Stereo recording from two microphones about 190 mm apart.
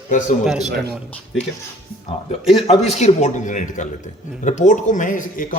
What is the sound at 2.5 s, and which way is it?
Speech, 30° left (ahead or behind).